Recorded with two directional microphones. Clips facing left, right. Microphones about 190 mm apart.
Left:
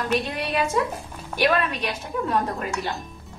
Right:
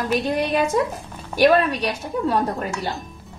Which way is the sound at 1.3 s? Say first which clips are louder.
Right 6 dB; 35° right (ahead or behind).